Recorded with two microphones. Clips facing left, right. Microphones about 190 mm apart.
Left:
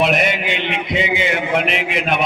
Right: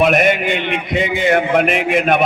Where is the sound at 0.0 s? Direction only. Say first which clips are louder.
Right 4 dB; 50° right (ahead or behind).